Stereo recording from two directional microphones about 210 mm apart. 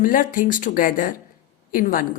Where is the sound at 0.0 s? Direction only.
40° left (ahead or behind).